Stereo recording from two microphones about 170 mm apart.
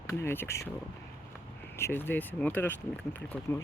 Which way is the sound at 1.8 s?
15° left (ahead or behind).